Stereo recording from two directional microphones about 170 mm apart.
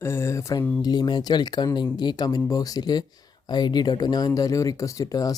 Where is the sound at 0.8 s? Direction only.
25° left (ahead or behind).